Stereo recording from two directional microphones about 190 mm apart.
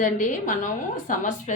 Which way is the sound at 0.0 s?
40° left (ahead or behind).